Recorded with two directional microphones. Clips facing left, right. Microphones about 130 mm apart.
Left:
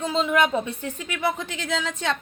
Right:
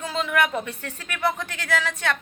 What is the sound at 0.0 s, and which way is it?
Speech, 25° left (ahead or behind).